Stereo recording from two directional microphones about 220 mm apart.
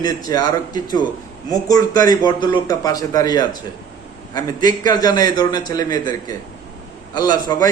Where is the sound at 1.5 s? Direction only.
15° left (ahead or behind).